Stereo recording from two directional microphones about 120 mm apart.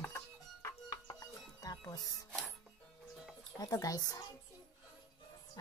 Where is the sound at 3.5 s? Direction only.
30° left (ahead or behind).